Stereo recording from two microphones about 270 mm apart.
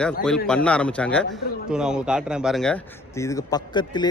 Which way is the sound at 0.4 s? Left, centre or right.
Centre.